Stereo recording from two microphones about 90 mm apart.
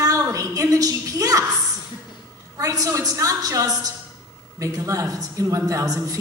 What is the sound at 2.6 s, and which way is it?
A woman's voice, 40° right (ahead or behind).